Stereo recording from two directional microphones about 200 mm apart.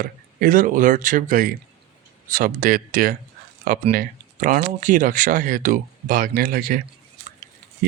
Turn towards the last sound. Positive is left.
turn(degrees=-45)  # may be behind; listen again after turning